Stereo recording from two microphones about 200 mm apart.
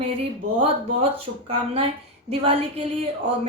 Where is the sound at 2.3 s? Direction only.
30° right (ahead or behind).